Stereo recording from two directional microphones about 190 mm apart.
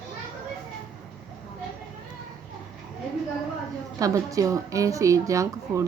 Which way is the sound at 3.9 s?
15° right (ahead or behind).